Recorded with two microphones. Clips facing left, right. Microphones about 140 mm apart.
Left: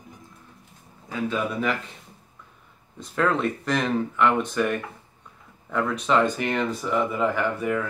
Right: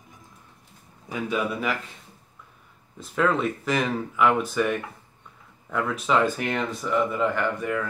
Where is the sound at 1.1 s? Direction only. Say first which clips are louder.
Even; 10° right (ahead or behind).